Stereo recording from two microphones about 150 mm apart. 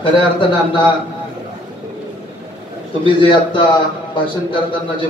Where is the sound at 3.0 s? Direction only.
35° left (ahead or behind).